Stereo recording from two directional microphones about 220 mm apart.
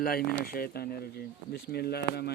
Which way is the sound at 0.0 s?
45° left (ahead or behind).